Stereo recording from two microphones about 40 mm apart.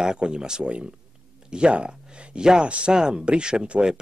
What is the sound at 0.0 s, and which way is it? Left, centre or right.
A man's voice, centre.